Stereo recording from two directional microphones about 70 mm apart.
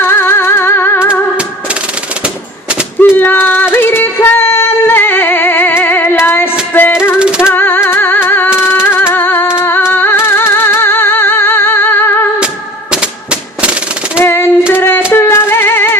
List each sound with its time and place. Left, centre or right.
0.0 s music: left
3.2 s female singing: left
7.2 s music: centre
7.5 s a sound: left
7.8 s music: left
12.9 s gunshot: centre
14.3 s child singing: left
14.7 s music: left